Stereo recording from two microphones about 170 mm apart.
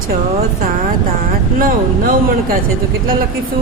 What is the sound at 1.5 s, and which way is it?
Speech, 55° right (ahead or behind).